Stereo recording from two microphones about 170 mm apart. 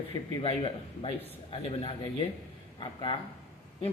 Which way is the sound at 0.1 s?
30° left (ahead or behind).